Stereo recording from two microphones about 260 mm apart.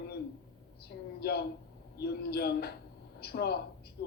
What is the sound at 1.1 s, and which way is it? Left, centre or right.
A man's voice, left.